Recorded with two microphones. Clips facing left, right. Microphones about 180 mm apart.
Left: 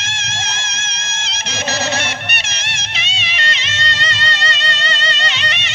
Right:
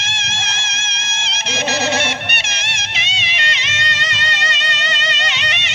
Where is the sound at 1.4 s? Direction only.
15° right (ahead or behind).